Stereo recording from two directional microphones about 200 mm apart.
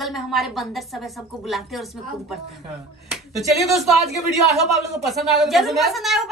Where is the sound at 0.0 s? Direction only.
Centre (ahead or behind).